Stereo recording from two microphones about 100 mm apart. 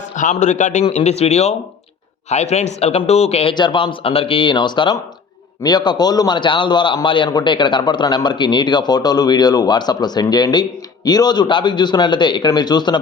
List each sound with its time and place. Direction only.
0.9 s speech: 90° left
3.5 s speech: 50° left (ahead or behind)